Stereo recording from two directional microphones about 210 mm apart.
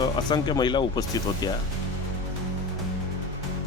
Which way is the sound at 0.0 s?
20° left (ahead or behind).